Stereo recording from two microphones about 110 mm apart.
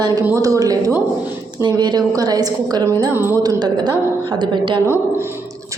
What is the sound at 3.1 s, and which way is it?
Speech, 20° right (ahead or behind).